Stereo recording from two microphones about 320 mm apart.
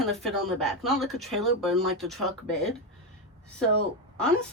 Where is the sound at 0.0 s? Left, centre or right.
Centre.